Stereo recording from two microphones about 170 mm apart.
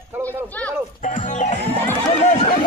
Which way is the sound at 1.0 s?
45° left (ahead or behind).